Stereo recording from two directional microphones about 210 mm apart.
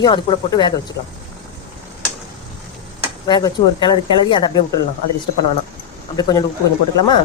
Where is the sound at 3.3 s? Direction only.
20° left (ahead or behind).